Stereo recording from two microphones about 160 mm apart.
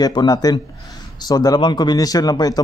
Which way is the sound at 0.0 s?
25° left (ahead or behind).